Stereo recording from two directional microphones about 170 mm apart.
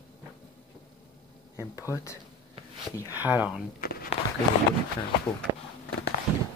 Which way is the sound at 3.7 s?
60° left (ahead or behind).